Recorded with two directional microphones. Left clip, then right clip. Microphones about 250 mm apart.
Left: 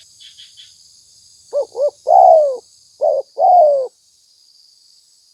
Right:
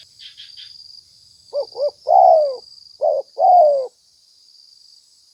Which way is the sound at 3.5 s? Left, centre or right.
Left.